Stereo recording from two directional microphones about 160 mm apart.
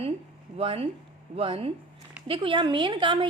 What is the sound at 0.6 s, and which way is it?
A woman's voice, 35° right (ahead or behind).